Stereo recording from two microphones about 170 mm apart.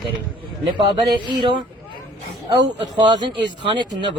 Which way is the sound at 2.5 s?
25° right (ahead or behind).